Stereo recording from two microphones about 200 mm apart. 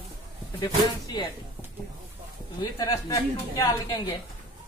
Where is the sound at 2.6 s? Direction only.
15° left (ahead or behind).